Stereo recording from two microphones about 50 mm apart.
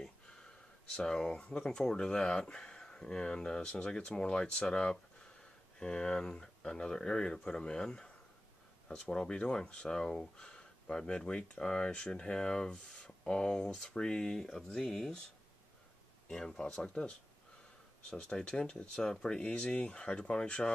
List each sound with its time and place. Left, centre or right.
0.0 s speech: centre
5.4 s a sound: centre
6.4 s speech: centre
16.3 s speech: centre
18.1 s speech: left